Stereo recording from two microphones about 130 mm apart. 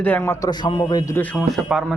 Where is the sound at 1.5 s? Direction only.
5° right (ahead or behind).